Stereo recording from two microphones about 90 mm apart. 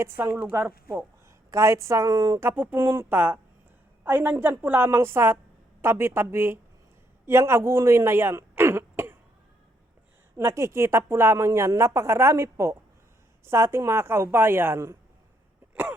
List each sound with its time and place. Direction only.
0.0 s a woman's voice: 25° right (ahead or behind); by 2.4 s 40° right (ahead or behind)
2.4 s a woman's voice: 25° right (ahead or behind)
10.3 s a woman's voice: 35° right (ahead or behind)
15.7 s throat clearing: 20° right (ahead or behind)